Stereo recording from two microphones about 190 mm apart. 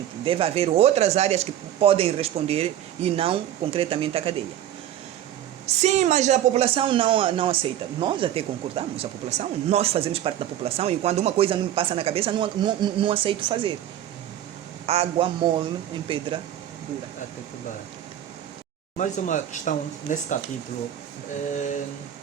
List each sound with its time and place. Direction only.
0.3 s speech: 30° right (ahead or behind)
5.6 s speech: 35° right (ahead or behind)
14.8 s speech: 30° right (ahead or behind)
18.9 s speech: 40° left (ahead or behind)
21.5 s speech: 40° left (ahead or behind)